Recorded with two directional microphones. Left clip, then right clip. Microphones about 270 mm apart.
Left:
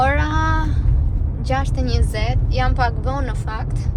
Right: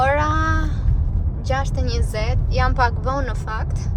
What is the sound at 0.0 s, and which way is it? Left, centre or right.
Child singing, centre.